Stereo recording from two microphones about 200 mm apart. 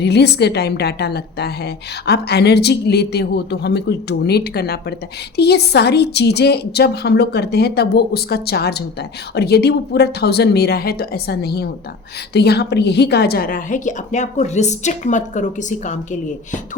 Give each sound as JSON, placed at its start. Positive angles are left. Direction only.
{"t": 0.0, "sound": "a woman's voice", "side_deg": 55}